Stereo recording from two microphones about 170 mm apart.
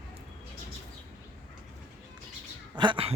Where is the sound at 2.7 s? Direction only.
30° right (ahead or behind).